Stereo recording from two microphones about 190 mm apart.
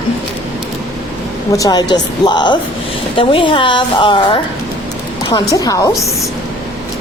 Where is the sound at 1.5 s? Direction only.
20° left (ahead or behind).